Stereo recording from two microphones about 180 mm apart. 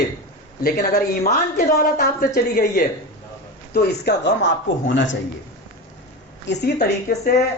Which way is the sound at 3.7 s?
70° left (ahead or behind).